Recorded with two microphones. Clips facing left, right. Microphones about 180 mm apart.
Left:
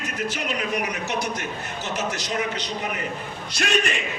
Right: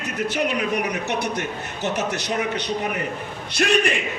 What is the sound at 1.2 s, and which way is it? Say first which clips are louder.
A man's voice: right 3 dB; 65° right (ahead or behind).